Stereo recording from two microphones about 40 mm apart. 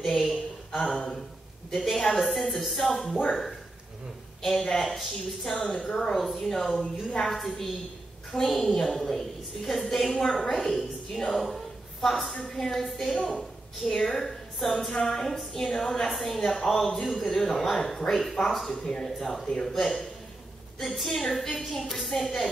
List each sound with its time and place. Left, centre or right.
0.0 s speech: centre
1.7 s a man's voice: centre
3.1 s speech: left
4.4 s a woman's voice: centre
10.2 s a woman's voice: centre
11.3 s a sound: centre
12.5 s a woman's voice: centre
19.0 s a man's voice: centre